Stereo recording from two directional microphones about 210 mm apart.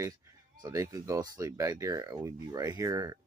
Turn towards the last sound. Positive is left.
turn(degrees=-15)  # may be behind; listen again after turning